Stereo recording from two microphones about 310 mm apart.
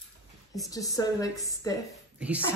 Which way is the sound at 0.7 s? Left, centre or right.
Centre.